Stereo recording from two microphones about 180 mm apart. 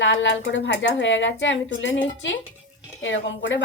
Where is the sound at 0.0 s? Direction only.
90° left.